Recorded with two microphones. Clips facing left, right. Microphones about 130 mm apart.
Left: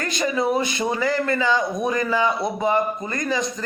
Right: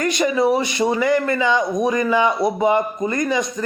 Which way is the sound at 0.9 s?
20° right (ahead or behind).